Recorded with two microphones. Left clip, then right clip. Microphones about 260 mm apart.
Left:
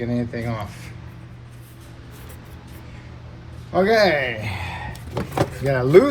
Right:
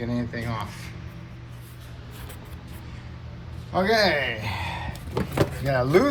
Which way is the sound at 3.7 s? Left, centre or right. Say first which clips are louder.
Left 4 dB; centre.